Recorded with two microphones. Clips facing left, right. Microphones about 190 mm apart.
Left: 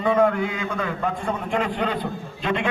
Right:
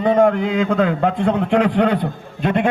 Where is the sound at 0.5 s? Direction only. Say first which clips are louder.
Right 10 dB; 55° right (ahead or behind).